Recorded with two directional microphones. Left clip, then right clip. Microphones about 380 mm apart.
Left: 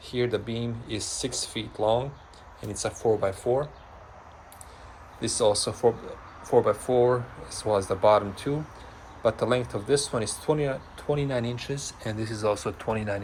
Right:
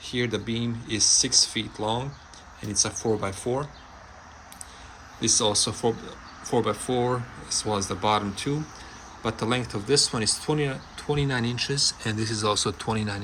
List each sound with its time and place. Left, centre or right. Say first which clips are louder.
0.1 s speech: left 1 dB; centre
1.0 s speech: right 14 dB; centre
1.5 s speech: left 3 dB; centre
5.2 s speech: right 1 dB; centre